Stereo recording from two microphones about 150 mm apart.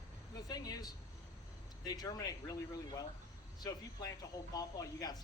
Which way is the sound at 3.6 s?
25° left (ahead or behind).